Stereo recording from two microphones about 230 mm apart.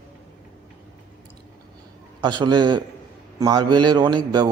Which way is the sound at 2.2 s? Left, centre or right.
Centre.